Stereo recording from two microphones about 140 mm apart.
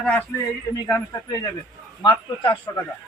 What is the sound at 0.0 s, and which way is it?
Speech, 10° left (ahead or behind).